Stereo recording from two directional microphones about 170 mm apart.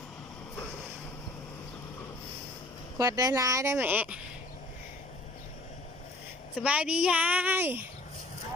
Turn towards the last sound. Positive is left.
turn(degrees=-10)  # may be behind; listen again after turning